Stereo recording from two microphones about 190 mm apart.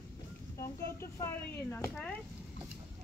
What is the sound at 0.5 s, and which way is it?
Speech, 15° left (ahead or behind).